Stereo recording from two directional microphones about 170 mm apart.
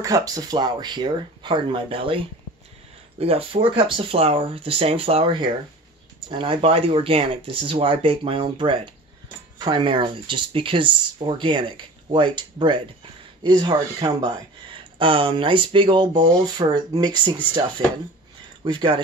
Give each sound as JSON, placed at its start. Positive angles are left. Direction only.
{"t": 0.0, "sound": "speech", "side_deg": -20}